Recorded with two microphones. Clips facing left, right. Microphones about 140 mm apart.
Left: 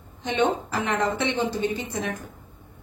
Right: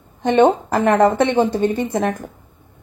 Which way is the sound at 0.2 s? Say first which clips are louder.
Right 10 dB; 55° right (ahead or behind).